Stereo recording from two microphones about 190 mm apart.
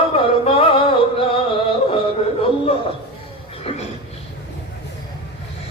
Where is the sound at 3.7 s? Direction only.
30° left (ahead or behind).